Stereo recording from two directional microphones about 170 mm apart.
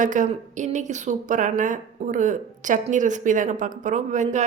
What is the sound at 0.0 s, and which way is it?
A woman's voice, 50° right (ahead or behind).